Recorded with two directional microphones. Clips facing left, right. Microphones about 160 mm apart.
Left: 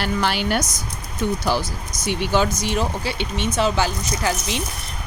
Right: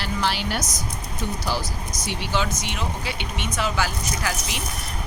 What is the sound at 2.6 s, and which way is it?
Speech, 35° left (ahead or behind).